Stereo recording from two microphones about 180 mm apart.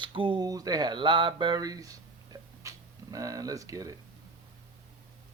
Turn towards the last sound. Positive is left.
turn(degrees=-20)  # may be behind; listen again after turning